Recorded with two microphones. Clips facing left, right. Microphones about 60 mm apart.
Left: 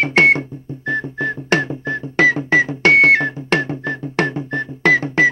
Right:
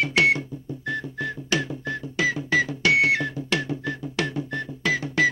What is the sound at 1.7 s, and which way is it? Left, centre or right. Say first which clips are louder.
Music: left 7 dB; left.